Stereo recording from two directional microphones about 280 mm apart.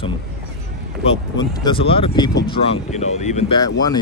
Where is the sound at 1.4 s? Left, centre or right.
Centre.